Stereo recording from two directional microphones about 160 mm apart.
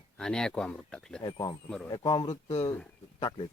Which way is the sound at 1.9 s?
30° left (ahead or behind).